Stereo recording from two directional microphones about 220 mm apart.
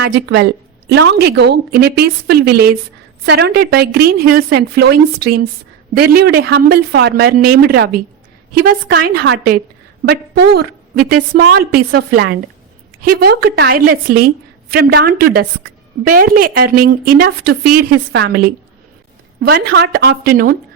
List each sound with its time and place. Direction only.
0.0 s a woman's voice: 50° right (ahead or behind)